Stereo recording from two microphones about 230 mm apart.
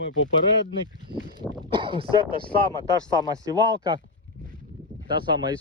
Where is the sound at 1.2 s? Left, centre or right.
Centre.